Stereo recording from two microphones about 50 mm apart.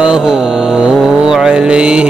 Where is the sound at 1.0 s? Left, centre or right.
Centre.